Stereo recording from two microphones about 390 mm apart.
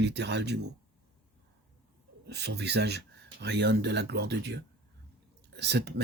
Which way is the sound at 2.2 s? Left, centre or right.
Right.